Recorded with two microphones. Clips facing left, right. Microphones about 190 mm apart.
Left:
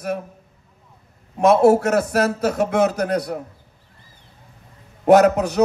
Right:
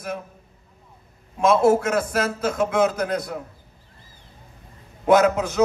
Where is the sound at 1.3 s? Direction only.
65° left (ahead or behind).